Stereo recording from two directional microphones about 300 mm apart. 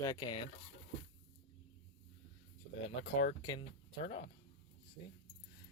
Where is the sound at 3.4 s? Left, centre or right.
Centre.